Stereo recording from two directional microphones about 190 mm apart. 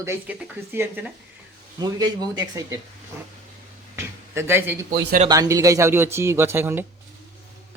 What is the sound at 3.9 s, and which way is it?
A man's voice, 15° right (ahead or behind).